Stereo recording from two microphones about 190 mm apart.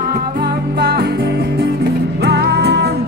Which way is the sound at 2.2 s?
60° right (ahead or behind).